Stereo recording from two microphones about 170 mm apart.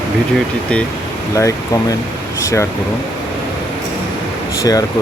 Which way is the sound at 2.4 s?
15° left (ahead or behind).